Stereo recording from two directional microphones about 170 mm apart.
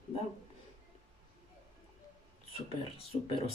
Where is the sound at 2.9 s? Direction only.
35° left (ahead or behind).